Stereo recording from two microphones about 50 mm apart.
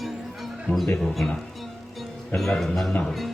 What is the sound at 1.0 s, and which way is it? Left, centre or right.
Speech, centre.